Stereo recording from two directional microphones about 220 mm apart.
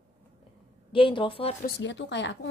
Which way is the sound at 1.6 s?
50° left (ahead or behind).